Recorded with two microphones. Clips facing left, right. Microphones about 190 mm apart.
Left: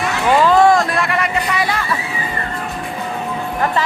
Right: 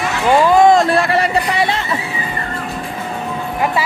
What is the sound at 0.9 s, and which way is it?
Music, 35° right (ahead or behind).